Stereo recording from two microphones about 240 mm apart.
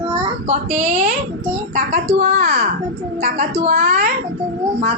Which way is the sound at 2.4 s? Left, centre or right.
Right.